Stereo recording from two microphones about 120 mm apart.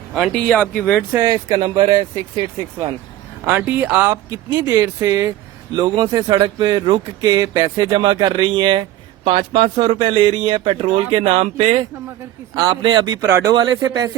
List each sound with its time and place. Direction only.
0.3 s speech: 10° left (ahead or behind)
1.1 s speech: 30° right (ahead or behind)
3.4 s speech: 15° right (ahead or behind)
4.1 s speech: 35° right (ahead or behind); by 11.8 s 60° right (ahead or behind)
12.7 s speech: 40° right (ahead or behind)